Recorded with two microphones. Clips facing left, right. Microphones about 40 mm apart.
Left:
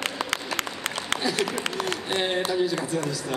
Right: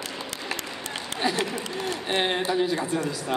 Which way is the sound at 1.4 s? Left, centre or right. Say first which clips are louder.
Left 2 dB; left.